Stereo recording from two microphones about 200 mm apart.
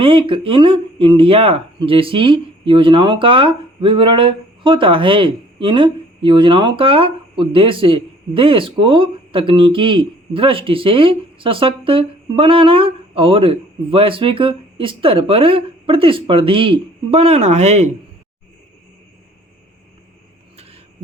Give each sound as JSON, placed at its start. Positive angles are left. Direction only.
{"t": 0.0, "sound": "speech", "side_deg": -25}